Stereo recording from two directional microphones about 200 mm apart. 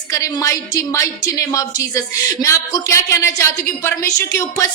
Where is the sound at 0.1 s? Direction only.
15° left (ahead or behind).